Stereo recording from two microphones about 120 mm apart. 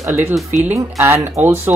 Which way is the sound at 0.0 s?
20° right (ahead or behind).